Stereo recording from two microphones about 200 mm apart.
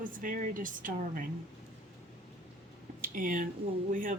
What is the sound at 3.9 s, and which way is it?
Speech, 45° right (ahead or behind).